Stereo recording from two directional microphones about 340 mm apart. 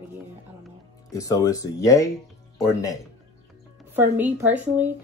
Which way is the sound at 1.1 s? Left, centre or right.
Centre.